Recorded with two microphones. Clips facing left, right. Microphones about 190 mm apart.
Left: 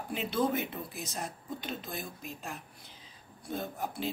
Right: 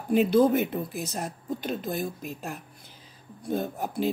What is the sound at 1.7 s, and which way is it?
Speech, 50° right (ahead or behind).